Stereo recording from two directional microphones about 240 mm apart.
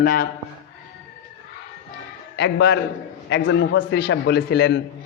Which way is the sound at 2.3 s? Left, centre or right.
Left.